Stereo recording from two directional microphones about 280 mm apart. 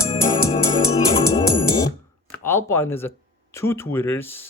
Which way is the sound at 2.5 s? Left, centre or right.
Centre.